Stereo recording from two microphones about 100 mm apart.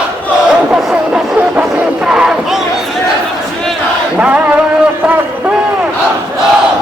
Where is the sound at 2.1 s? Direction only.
10° right (ahead or behind).